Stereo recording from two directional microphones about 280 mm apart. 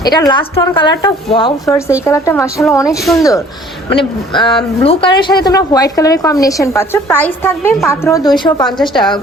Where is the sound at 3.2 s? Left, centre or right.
Centre.